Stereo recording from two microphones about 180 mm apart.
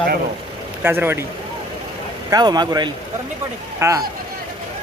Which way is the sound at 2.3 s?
25° right (ahead or behind).